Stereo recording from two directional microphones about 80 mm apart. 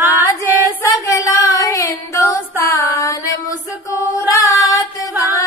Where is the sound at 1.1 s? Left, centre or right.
Left.